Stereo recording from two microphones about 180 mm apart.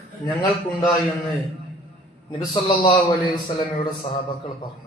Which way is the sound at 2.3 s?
30° left (ahead or behind).